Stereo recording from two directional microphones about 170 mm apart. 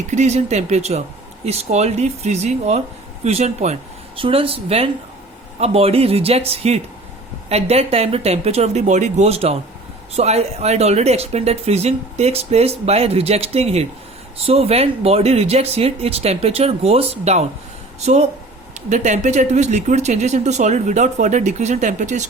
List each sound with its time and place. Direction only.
0.1 s speech: 40° right (ahead or behind)